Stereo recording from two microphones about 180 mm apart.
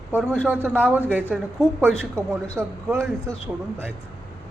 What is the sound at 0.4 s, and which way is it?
Speech, 10° right (ahead or behind).